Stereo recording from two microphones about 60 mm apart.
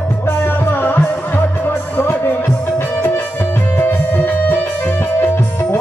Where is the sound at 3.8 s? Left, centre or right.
Left.